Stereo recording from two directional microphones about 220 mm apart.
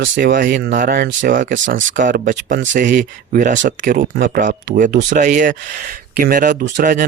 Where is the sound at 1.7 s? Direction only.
60° right (ahead or behind).